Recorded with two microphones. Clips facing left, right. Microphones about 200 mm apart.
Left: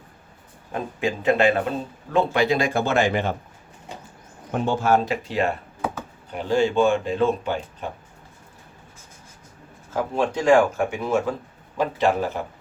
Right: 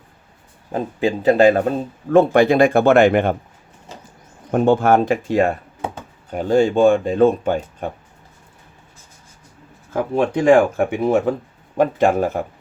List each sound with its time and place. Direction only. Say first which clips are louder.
0.7 s speech: right 6 dB; 30° right (ahead or behind)
2.1 s speech: right 8 dB; 50° right (ahead or behind)
4.5 s speech: right 6 dB; 55° right (ahead or behind)
9.9 s speech: right 5 dB; 55° right (ahead or behind)